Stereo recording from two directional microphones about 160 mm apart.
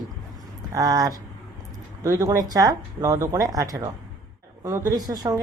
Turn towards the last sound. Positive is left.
turn(degrees=-25)  # may be behind; listen again after turning